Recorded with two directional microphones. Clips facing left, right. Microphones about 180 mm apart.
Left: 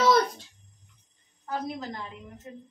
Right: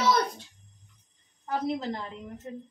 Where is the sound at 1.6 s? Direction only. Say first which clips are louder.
Right 5 dB; 30° right (ahead or behind).